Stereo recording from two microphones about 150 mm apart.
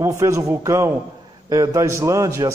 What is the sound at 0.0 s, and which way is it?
A man's voice, 20° right (ahead or behind).